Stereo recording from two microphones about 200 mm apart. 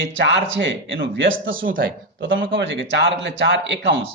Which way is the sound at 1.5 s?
45° right (ahead or behind).